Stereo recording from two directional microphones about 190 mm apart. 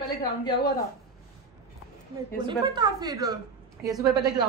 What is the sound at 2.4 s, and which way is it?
Speech, 25° right (ahead or behind).